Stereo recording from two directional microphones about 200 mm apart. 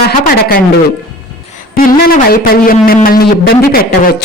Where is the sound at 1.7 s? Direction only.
45° left (ahead or behind).